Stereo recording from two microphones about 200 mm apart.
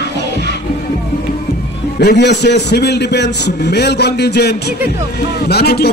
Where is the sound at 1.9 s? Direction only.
55° left (ahead or behind).